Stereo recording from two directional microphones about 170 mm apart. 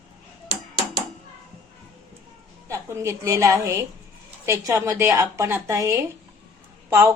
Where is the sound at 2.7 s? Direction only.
15° right (ahead or behind).